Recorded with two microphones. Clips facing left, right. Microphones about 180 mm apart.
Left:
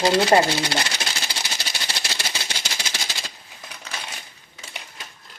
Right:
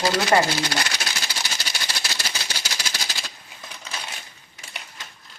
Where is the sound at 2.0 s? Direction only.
25° left (ahead or behind).